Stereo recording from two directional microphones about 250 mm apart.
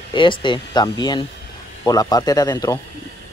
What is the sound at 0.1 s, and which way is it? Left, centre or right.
Speech, centre.